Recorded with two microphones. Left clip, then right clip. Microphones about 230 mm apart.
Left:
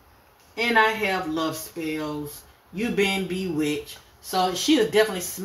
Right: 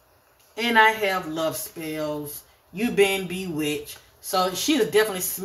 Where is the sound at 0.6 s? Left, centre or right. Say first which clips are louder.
Right 2 dB; right.